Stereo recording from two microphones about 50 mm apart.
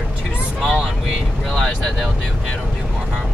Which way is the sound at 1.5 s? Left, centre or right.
Centre.